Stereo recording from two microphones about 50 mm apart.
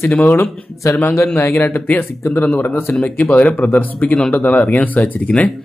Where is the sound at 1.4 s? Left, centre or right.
Left.